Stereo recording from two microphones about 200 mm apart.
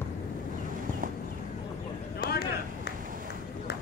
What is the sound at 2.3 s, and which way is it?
Run, 50° left (ahead or behind).